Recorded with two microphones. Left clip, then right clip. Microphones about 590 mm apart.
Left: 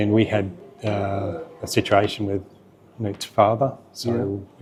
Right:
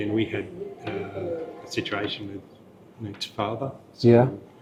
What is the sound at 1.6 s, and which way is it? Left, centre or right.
Speech, left.